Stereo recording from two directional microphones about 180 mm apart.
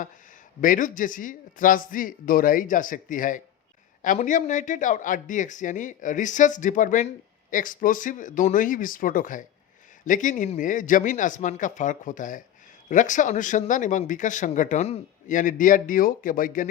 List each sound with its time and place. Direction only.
0.6 s speech: 45° left (ahead or behind)